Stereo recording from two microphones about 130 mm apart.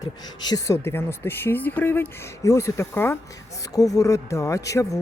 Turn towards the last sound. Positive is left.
turn(degrees=25)  # may be behind; listen again after turning